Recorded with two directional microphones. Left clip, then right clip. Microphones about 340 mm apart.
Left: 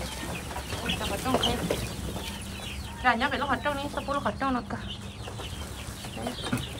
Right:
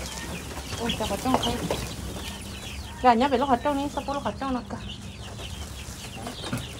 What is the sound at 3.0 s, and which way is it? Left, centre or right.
Speech, centre.